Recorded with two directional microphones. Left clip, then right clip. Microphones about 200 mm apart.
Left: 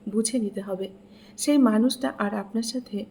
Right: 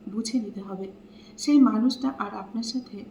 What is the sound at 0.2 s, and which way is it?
Speech, 50° left (ahead or behind).